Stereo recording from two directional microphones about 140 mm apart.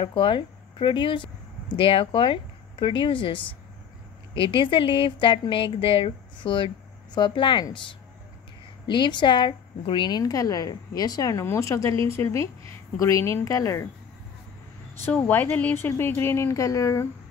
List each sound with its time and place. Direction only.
0.0 s speech: 35° left (ahead or behind)
8.8 s a woman's voice: 35° left (ahead or behind)
15.1 s speech: 10° left (ahead or behind)